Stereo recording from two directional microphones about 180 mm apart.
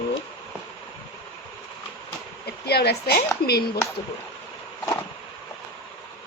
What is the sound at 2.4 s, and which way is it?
Speech, 65° left (ahead or behind).